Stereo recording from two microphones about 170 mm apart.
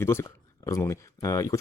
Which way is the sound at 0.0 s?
15° left (ahead or behind).